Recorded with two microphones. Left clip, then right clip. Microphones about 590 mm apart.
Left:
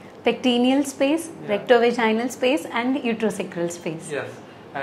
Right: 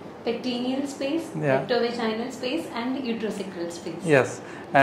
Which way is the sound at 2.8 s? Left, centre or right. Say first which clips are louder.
Left 6 dB; left.